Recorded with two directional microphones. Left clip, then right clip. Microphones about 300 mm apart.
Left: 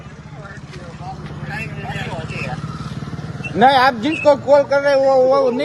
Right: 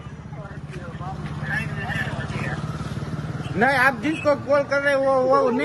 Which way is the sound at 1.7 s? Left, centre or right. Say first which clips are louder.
Even; centre.